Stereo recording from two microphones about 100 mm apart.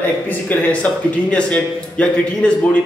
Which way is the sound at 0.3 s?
15° left (ahead or behind).